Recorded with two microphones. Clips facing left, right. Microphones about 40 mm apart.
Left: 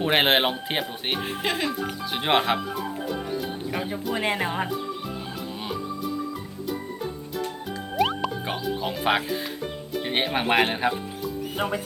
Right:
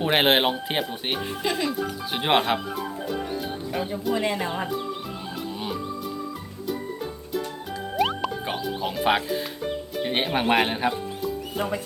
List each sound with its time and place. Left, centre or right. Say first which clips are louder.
0.0 s speech: even; centre
1.4 s speech: right 1 dB; left
2.1 s speech: even; centre
3.7 s speech: right 3 dB; centre
7.9 s music: even; centre
9.6 s speech: right 2 dB; centre